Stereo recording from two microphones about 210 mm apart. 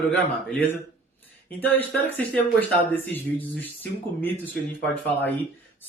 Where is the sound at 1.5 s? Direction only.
10° left (ahead or behind).